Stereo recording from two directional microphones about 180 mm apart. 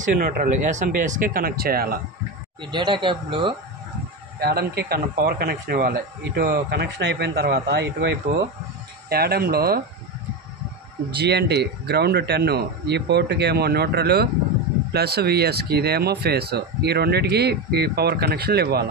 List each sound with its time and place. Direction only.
0.0 s speech: 50° right (ahead or behind)
2.6 s speech: 25° right (ahead or behind)
4.4 s speech: 60° right (ahead or behind)
9.1 s speech: 60° right (ahead or behind)
11.1 s speech: 65° right (ahead or behind)